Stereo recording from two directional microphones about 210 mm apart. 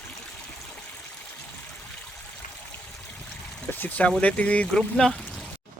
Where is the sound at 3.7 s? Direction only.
10° left (ahead or behind).